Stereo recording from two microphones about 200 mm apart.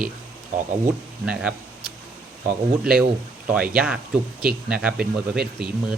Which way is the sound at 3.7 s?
5° right (ahead or behind).